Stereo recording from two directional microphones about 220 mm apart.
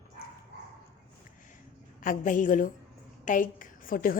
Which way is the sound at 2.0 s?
35° left (ahead or behind).